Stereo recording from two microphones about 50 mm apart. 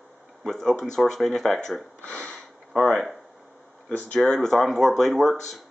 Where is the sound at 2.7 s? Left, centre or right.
Centre.